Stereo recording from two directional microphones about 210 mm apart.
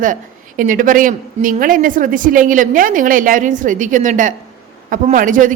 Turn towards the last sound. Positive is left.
turn(degrees=-40)  # may be behind; listen again after turning